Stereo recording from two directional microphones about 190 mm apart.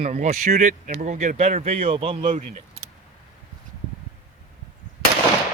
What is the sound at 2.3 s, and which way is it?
Speech, 40° right (ahead or behind).